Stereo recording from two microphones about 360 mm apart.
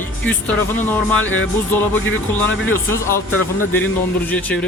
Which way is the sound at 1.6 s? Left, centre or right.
Centre.